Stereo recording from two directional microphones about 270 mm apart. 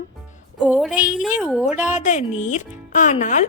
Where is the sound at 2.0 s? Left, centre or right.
Left.